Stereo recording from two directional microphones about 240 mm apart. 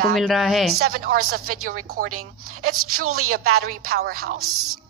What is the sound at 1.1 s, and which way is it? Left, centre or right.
Speech, right.